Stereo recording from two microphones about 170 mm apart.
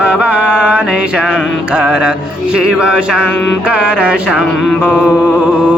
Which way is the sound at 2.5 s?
5° right (ahead or behind).